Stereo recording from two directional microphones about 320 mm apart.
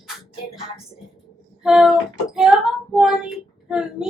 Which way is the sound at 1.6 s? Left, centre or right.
Centre.